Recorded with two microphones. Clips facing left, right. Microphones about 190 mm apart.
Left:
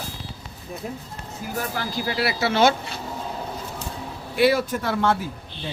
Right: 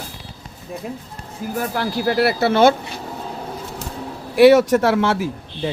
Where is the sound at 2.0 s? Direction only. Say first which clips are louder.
Right 8 dB; 55° right (ahead or behind).